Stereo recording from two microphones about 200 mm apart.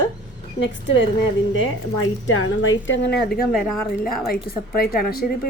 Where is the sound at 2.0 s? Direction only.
80° left.